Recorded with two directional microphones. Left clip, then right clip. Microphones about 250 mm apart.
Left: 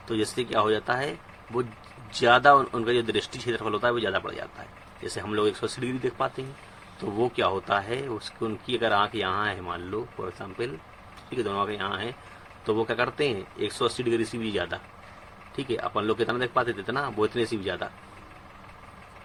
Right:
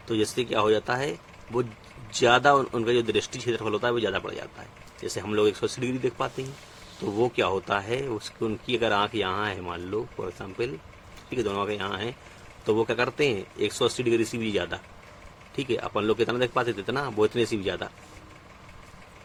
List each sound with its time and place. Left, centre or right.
0.1 s speech: right
2.1 s speech: right